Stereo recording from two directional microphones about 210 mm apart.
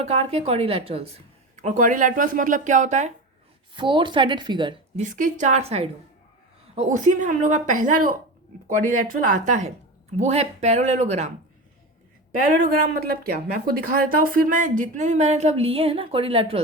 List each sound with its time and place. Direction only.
0.0 s a woman's voice: 30° right (ahead or behind)
3.8 s a woman's voice: 25° right (ahead or behind)
5.0 s speech: 35° right (ahead or behind)
12.6 s speech: 40° right (ahead or behind); by 16.6 s 25° right (ahead or behind)